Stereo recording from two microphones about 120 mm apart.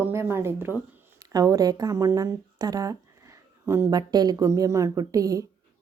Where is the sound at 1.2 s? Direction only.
30° right (ahead or behind).